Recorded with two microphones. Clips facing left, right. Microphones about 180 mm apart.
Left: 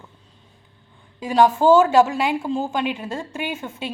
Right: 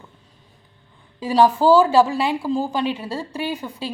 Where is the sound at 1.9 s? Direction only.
35° right (ahead or behind).